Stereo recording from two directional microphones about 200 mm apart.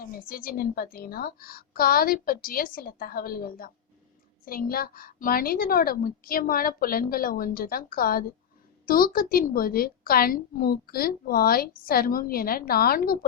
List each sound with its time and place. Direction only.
0.0 s a woman's voice: 45° left (ahead or behind)